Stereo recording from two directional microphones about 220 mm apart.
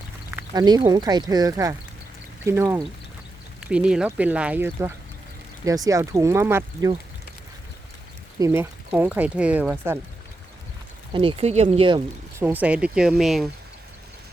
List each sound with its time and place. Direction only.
0.3 s speech: 20° right (ahead or behind)
8.4 s speech: 10° right (ahead or behind)
11.1 s speech: 25° right (ahead or behind)
12.5 s speech: 5° right (ahead or behind)